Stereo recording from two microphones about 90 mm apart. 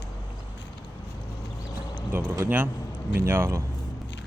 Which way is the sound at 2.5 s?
20° right (ahead or behind).